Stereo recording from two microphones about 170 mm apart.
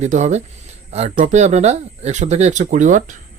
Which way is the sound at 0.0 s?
45° right (ahead or behind).